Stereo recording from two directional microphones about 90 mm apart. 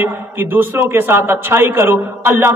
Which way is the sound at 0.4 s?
25° right (ahead or behind).